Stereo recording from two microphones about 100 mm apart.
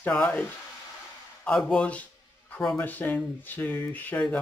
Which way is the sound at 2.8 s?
20° left (ahead or behind).